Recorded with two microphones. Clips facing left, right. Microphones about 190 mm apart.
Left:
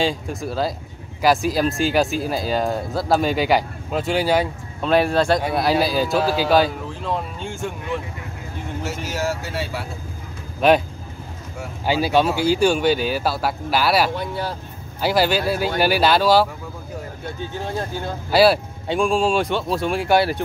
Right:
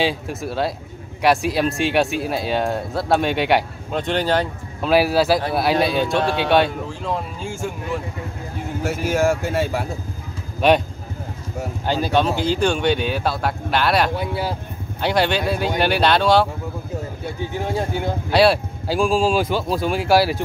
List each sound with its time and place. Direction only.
0.0 s speech: centre (ahead or behind)
4.8 s speech: 5° right (ahead or behind)
8.8 s speech: 50° right (ahead or behind)
10.6 s speech: centre (ahead or behind)
11.8 s speech: 10° left (ahead or behind)
14.1 s speech: 10° right (ahead or behind)
15.0 s speech: 5° left (ahead or behind)
17.5 s speech: 15° right (ahead or behind)
18.3 s speech: centre (ahead or behind)